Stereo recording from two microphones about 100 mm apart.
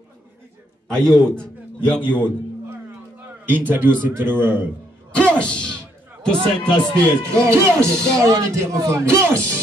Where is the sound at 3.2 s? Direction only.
20° right (ahead or behind).